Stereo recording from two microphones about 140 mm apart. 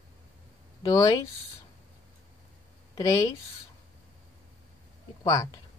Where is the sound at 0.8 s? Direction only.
25° left (ahead or behind).